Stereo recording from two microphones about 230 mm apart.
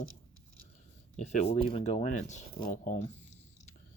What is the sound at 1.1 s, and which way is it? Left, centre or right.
Speech, left.